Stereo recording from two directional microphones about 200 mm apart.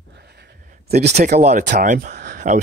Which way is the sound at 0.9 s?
55° right (ahead or behind).